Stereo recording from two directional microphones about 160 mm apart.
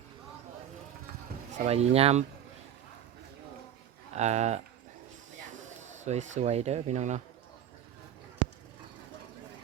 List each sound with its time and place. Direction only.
1.5 s speech: 40° right (ahead or behind)
4.1 s speech: 45° right (ahead or behind)
6.1 s speech: 45° right (ahead or behind)